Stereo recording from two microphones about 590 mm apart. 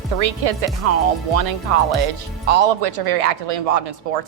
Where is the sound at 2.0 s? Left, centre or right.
Right.